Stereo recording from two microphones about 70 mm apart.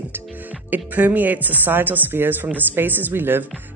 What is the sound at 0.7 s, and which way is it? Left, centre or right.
Speech, right.